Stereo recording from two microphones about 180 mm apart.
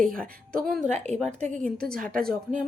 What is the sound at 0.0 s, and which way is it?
Speech, 5° left (ahead or behind).